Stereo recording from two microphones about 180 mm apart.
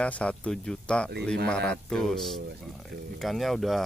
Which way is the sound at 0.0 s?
5° left (ahead or behind).